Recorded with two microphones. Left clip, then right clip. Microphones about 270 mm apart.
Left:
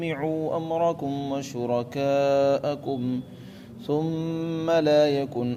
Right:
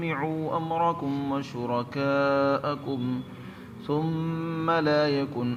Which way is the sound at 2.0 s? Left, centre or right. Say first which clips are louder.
Left 2 dB; left.